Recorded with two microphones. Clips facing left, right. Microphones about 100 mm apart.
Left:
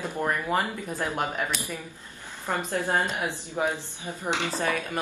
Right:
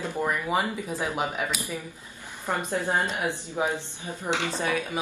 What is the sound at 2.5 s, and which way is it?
Speech, 15° right (ahead or behind).